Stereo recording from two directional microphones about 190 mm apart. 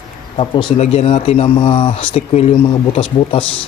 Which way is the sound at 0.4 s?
25° left (ahead or behind).